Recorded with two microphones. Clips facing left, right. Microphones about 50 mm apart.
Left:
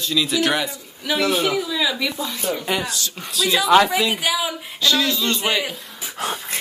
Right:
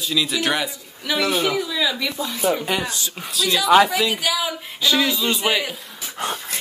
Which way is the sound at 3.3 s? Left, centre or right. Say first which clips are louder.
Even; centre.